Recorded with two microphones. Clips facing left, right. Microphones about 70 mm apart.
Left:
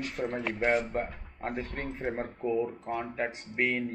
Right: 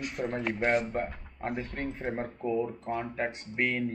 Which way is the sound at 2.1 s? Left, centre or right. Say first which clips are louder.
Left 1 dB; left.